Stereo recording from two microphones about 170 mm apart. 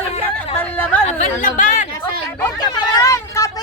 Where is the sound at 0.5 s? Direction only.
10° left (ahead or behind).